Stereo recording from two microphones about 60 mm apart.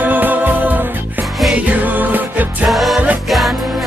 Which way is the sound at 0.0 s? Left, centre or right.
Right.